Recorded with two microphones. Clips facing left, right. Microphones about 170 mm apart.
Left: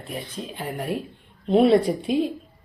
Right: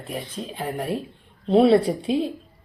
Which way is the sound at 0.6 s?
30° right (ahead or behind).